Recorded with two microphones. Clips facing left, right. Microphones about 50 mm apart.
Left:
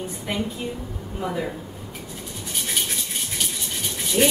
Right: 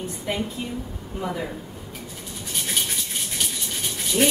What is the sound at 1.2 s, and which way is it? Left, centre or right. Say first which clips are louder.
Child singing: left 2 dB; centre.